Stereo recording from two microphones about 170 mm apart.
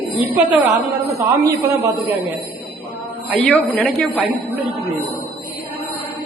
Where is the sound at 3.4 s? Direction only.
5° left (ahead or behind).